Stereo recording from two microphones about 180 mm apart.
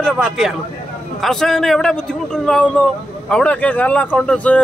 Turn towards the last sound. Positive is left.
turn(degrees=5)  # may be behind; listen again after turning